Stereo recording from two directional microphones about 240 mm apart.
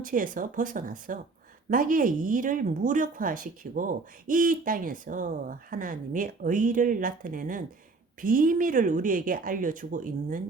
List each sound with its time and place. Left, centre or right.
0.0 s speech: right